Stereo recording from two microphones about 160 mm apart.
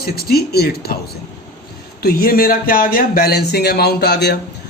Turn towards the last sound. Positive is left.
turn(degrees=90)